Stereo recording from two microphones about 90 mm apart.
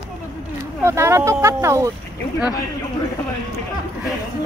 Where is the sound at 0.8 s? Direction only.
30° right (ahead or behind).